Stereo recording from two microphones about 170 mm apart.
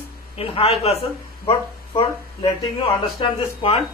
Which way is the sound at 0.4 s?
35° left (ahead or behind).